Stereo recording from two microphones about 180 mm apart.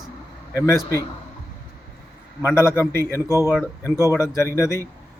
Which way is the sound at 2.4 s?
15° left (ahead or behind).